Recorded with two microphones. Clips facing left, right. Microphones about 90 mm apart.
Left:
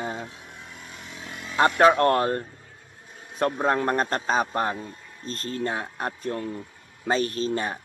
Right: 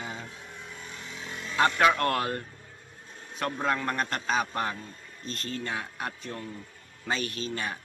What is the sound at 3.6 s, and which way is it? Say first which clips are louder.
A man's voice: left 4 dB; 40° left (ahead or behind).